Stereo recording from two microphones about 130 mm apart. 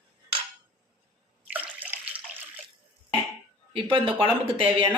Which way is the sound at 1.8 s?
10° right (ahead or behind).